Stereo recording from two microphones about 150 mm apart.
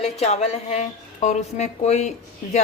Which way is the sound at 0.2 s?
45° left (ahead or behind).